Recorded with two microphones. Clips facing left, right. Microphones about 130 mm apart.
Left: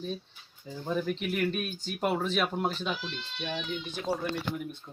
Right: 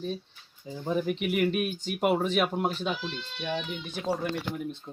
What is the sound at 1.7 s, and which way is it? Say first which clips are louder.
Speech: right 4 dB; 65° right (ahead or behind).